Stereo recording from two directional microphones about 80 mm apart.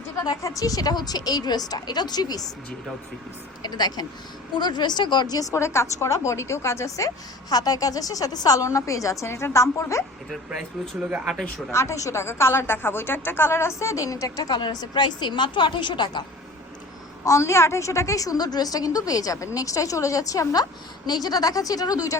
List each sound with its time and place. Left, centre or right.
0.2 s a woman's voice: left
3.6 s a woman's voice: left
11.7 s a woman's voice: left
17.2 s a woman's voice: left